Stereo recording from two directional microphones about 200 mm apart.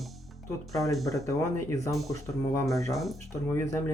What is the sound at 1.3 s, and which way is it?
Speech, 15° left (ahead or behind).